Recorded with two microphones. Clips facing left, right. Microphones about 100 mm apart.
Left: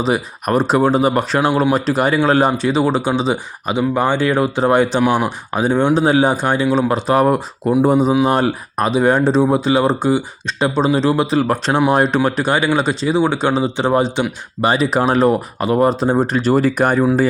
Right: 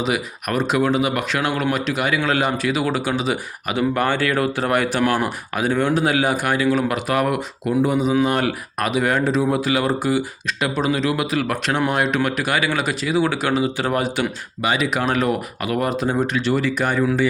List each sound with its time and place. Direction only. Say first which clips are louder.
0.0 s speech: left 5 dB; 35° left (ahead or behind)
14.6 s speech: left 5 dB; 35° left (ahead or behind)